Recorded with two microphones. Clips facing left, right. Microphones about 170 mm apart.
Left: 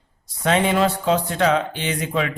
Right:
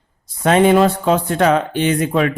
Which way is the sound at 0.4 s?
55° right (ahead or behind).